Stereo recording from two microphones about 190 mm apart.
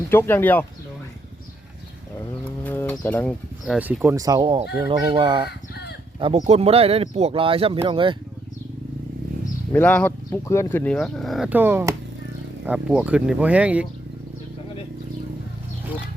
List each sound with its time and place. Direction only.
0.1 s speech: 10° left (ahead or behind)
2.6 s bird: 10° left (ahead or behind)
3.7 s speech: 5° right (ahead or behind); by 8.1 s 25° right (ahead or behind)
9.7 s speech: 10° left (ahead or behind); by 13.8 s 5° right (ahead or behind)